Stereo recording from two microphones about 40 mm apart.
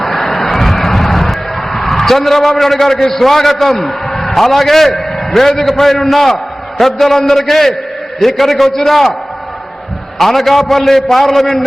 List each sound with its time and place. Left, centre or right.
0.0 s vehicle: centre
7.3 s a man's voice: centre
10.2 s a man's voice: centre